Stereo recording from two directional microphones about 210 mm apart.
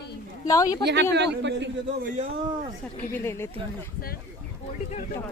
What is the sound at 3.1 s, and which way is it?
Speech, 10° left (ahead or behind).